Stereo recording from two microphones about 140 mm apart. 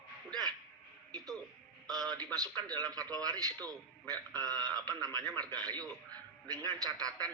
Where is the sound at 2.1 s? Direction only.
25° right (ahead or behind).